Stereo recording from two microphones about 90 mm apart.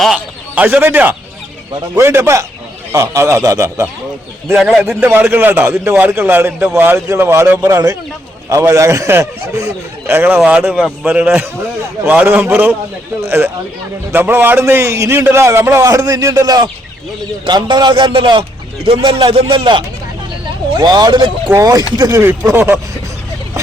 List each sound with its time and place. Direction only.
0.5 s a man's voice: 20° right (ahead or behind); by 3.8 s 35° right (ahead or behind)
4.5 s a man's voice: 5° right (ahead or behind)
4.8 s a man's voice: 20° right (ahead or behind); by 19.8 s 70° right (ahead or behind)
20.7 s speech: 50° right (ahead or behind)
21.5 s a man's voice: 40° right (ahead or behind)
22.1 s a man's voice: 25° right (ahead or behind)